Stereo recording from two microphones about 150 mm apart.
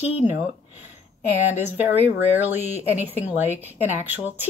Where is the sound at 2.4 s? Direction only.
15° right (ahead or behind).